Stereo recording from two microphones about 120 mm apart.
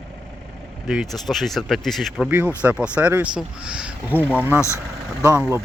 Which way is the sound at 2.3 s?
15° right (ahead or behind).